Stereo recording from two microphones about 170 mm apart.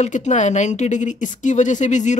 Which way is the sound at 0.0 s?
45° left (ahead or behind).